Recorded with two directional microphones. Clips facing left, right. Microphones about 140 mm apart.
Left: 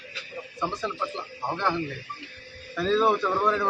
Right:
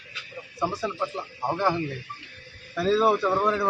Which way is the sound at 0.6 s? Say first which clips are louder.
Right 2 dB; 10° right (ahead or behind).